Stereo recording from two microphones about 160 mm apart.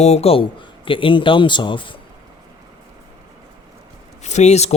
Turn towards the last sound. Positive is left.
turn(degrees=40)  # may be behind; listen again after turning